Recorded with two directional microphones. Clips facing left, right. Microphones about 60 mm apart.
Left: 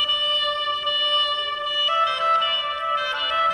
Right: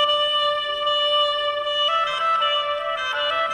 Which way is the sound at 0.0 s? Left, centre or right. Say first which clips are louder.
Right 4 dB; centre.